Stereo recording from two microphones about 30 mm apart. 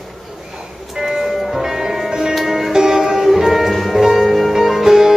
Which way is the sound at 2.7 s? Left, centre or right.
Right.